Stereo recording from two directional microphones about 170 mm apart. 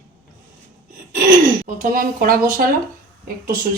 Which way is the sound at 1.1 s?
50° right (ahead or behind).